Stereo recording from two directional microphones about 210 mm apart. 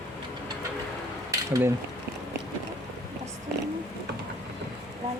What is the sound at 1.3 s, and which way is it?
Mechanisms, 15° right (ahead or behind).